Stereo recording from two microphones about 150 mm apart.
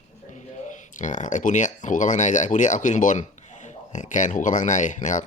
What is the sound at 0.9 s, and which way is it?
Speech, 55° left (ahead or behind).